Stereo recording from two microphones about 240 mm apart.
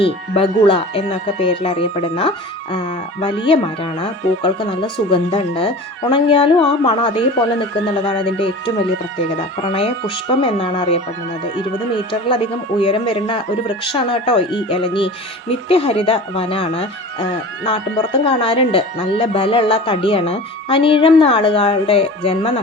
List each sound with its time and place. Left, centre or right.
0.0 s speech: left
9.7 s speech: left
12.8 s speech: left